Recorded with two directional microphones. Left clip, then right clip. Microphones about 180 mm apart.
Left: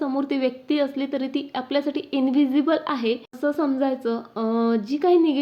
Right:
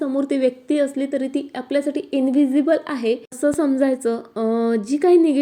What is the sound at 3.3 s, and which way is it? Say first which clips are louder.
Speech: right 5 dB; 20° right (ahead or behind).